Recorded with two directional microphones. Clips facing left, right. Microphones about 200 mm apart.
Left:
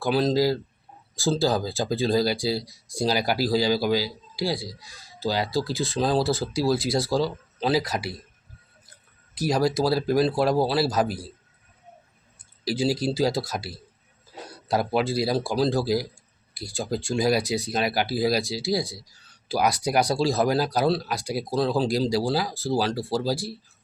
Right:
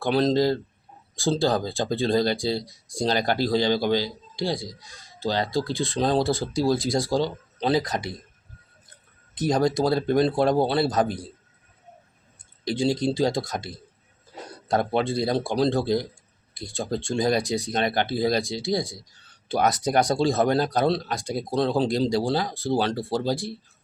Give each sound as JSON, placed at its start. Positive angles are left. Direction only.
{"t": 0.0, "sound": "a man's voice", "side_deg": 5}
{"t": 6.9, "sound": "speech", "side_deg": -15}
{"t": 7.2, "sound": "a man's voice", "side_deg": 5}
{"t": 9.4, "sound": "a man's voice", "side_deg": 0}
{"t": 12.6, "sound": "a man's voice", "side_deg": 5}
{"t": 14.7, "sound": "a man's voice", "side_deg": 5}